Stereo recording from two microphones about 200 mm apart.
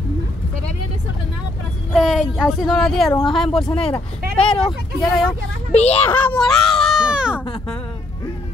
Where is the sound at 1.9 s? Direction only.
5° right (ahead or behind).